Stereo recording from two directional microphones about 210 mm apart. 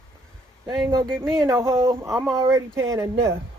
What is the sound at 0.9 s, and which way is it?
Speech, 15° right (ahead or behind).